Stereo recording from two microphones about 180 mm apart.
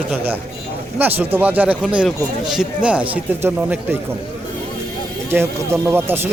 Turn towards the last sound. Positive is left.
turn(degrees=-10)  # may be behind; listen again after turning